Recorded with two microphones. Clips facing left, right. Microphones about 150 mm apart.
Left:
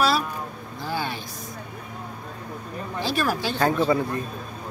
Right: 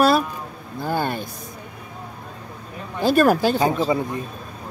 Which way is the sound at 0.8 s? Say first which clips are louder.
Right 6 dB; 50° right (ahead or behind).